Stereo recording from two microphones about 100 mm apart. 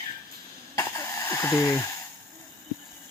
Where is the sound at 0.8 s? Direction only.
35° left (ahead or behind).